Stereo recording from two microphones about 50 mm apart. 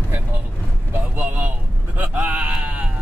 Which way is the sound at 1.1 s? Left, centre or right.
Right.